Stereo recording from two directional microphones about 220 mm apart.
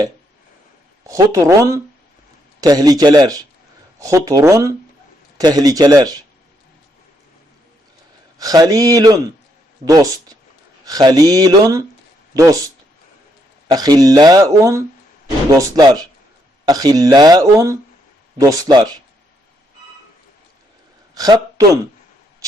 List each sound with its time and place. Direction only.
1.0 s speech: 15° right (ahead or behind)
8.4 s speech: 15° right (ahead or behind)
21.2 s a man's voice: 15° right (ahead or behind)